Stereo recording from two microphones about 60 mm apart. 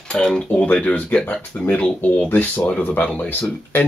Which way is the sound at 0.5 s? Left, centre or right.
Left.